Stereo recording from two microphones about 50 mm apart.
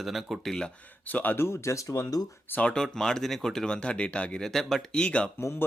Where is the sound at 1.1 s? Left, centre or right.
Left.